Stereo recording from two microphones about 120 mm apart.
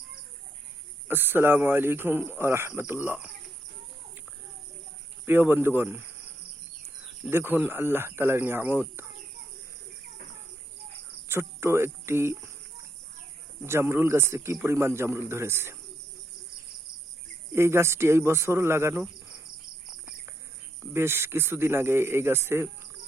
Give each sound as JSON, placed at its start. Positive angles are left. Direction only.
{"t": 1.0, "sound": "speech", "side_deg": -15}
{"t": 5.2, "sound": "speech", "side_deg": -15}
{"t": 7.3, "sound": "a man's voice", "side_deg": -20}
{"t": 11.3, "sound": "speech", "side_deg": -20}
{"t": 13.6, "sound": "a man's voice", "side_deg": -20}
{"t": 17.5, "sound": "a man's voice", "side_deg": -20}
{"t": 20.9, "sound": "a man's voice", "side_deg": -20}